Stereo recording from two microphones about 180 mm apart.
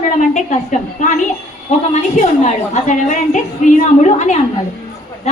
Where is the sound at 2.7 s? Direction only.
40° left (ahead or behind).